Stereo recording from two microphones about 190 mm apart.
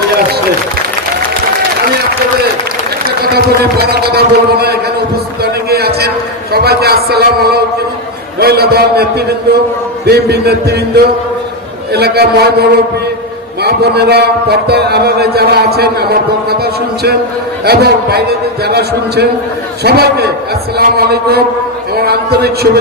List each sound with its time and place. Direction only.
3.2 s a man's voice: 55° right (ahead or behind)
5.4 s heart sounds: 55° right (ahead or behind)
6.5 s a man's voice: 55° right (ahead or behind)
17.7 s a man's voice: 55° right (ahead or behind)